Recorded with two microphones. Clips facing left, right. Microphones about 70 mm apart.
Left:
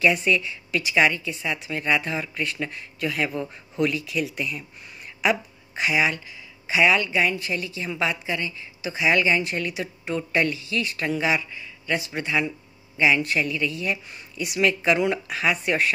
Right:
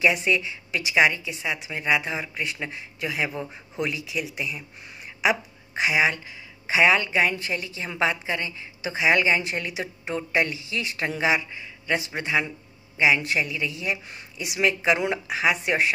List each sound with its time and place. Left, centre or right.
0.2 s speech: right
5.8 s a woman's voice: right